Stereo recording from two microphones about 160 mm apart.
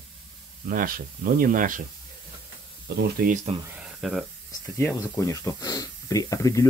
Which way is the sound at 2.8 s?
90° right.